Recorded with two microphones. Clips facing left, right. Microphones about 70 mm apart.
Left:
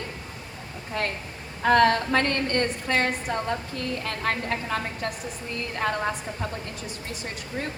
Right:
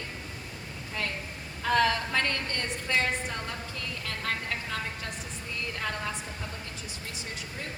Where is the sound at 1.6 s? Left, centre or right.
Left.